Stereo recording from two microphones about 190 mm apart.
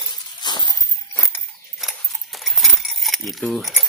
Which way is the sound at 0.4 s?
25° left (ahead or behind).